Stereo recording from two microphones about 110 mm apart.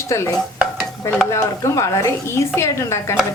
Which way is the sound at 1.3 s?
25° left (ahead or behind).